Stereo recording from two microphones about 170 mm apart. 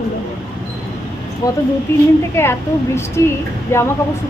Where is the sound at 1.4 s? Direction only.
20° left (ahead or behind).